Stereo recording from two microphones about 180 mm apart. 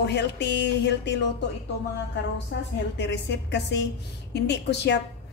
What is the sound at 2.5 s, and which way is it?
A woman's voice, 75° left (ahead or behind).